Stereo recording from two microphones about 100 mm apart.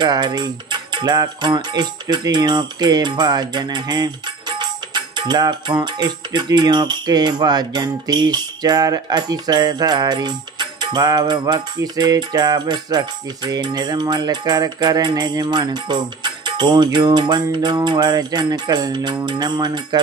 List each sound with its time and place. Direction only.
0.0 s speech: 45° right (ahead or behind)